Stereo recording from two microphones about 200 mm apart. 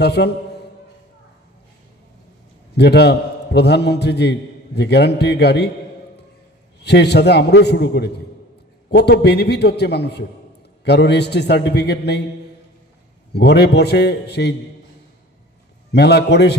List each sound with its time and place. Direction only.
0.0 s a man's voice: 55° left (ahead or behind)
2.8 s a man's voice: 55° left (ahead or behind)
6.8 s a man's voice: 55° left (ahead or behind)
13.3 s a man's voice: 55° left (ahead or behind)
15.9 s a man's voice: 55° left (ahead or behind)